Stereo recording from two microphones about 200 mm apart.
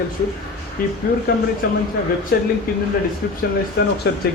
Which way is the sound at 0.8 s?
45° left (ahead or behind).